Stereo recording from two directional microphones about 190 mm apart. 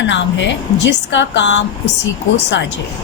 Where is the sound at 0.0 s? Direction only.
65° left (ahead or behind).